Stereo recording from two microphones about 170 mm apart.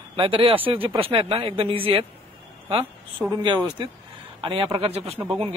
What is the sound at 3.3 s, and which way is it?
Speech, 25° right (ahead or behind).